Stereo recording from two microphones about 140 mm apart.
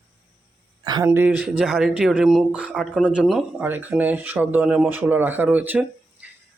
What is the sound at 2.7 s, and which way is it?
Speech, 5° left (ahead or behind).